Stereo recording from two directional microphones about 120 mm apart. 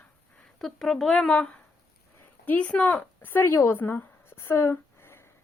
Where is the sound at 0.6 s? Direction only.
5° left (ahead or behind).